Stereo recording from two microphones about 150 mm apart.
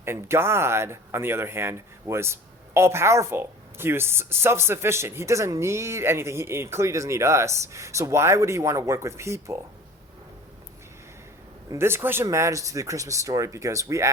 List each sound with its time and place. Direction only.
0.0 s speech: 15° right (ahead or behind)
11.7 s speech: 15° right (ahead or behind)